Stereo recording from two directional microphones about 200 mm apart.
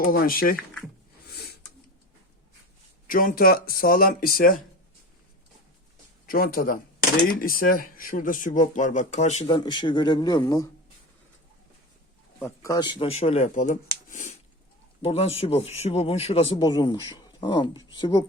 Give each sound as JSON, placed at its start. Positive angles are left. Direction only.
{"t": 0.0, "sound": "speech", "side_deg": 45}
{"t": 1.3, "sound": "a sound", "side_deg": 55}
{"t": 3.1, "sound": "speech", "side_deg": 45}
{"t": 6.2, "sound": "speech", "side_deg": 45}
{"t": 12.4, "sound": "a man's voice", "side_deg": 15}